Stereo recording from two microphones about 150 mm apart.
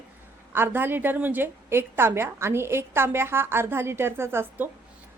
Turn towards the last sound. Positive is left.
turn(degrees=-15)  # may be behind; listen again after turning